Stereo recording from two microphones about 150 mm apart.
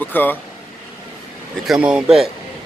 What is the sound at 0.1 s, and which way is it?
Speech, 10° left (ahead or behind).